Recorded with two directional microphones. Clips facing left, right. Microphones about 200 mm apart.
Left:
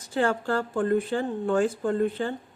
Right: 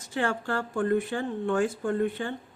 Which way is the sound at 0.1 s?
35° left (ahead or behind).